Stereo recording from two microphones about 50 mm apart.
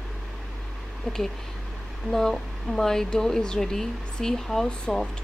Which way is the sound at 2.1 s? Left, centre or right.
Centre.